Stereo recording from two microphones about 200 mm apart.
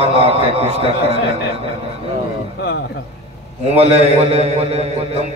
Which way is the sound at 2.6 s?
55° left (ahead or behind).